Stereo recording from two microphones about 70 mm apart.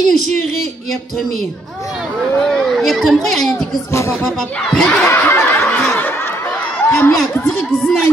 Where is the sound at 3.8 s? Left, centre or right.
Left.